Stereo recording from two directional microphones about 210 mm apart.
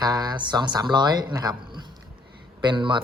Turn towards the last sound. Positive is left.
turn(degrees=-25)  # may be behind; listen again after turning